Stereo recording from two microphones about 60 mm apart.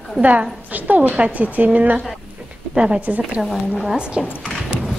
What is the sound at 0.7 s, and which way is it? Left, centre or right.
A woman's voice, right.